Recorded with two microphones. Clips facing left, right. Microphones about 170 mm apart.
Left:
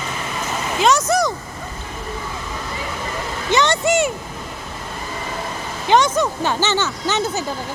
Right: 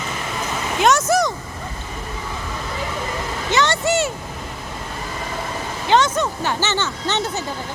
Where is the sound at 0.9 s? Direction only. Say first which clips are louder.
Even; centre (ahead or behind).